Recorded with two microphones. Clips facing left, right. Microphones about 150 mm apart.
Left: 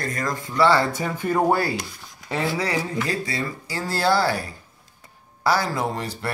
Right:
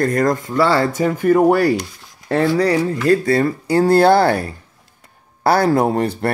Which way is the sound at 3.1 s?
55° right (ahead or behind).